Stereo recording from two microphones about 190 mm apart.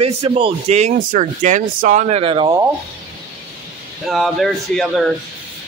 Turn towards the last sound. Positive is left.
turn(degrees=0)  # may be behind; listen again after turning